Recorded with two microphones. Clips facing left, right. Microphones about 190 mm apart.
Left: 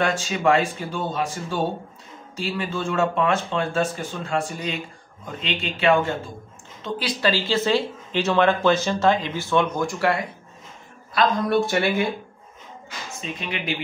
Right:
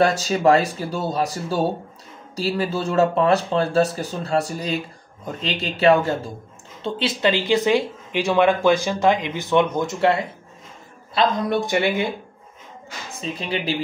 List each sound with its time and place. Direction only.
0.0 s speech: 40° right (ahead or behind)
6.8 s speech: 25° right (ahead or behind)
13.2 s speech: 35° right (ahead or behind)